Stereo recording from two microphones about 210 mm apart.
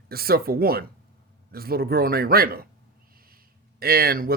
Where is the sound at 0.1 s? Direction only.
45° right (ahead or behind).